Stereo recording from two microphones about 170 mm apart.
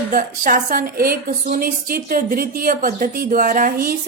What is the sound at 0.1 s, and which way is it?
A woman's voice, 55° right (ahead or behind).